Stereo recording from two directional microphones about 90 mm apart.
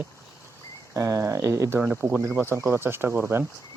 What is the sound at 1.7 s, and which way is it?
Speech, 10° right (ahead or behind).